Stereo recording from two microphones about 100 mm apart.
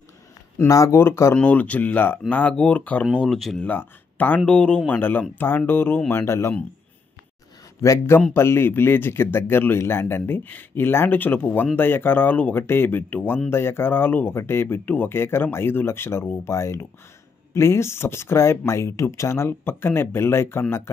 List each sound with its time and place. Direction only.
0.6 s speech: 30° left (ahead or behind)
1.3 s speech: 15° left (ahead or behind)
3.6 s speech: 20° left (ahead or behind)
7.8 s a man's voice: 30° left (ahead or behind)